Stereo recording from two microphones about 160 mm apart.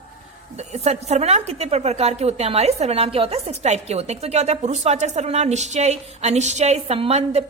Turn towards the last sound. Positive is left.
turn(degrees=-40)  # may be behind; listen again after turning